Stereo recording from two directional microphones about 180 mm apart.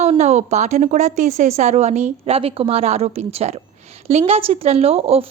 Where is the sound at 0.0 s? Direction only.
35° right (ahead or behind).